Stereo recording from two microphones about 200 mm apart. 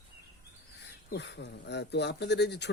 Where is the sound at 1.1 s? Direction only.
55° left (ahead or behind).